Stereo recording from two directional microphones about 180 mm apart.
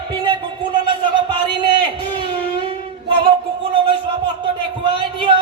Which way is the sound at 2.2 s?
30° right (ahead or behind).